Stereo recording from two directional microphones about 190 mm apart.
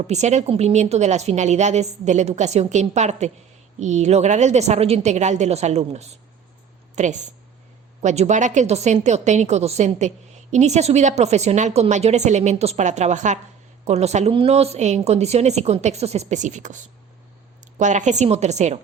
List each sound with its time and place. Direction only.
0.0 s a woman's voice: 35° right (ahead or behind)